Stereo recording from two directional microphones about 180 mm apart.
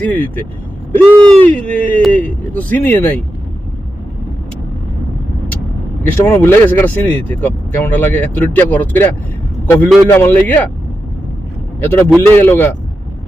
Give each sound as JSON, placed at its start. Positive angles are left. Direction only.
{"t": 0.0, "sound": "speech", "side_deg": 10}
{"t": 6.0, "sound": "speech", "side_deg": 10}
{"t": 11.8, "sound": "speech", "side_deg": 10}